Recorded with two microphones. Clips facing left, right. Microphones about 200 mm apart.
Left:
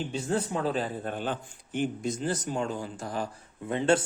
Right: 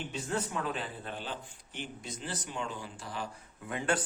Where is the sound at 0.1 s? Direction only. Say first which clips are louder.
Left 4 dB; 30° left (ahead or behind).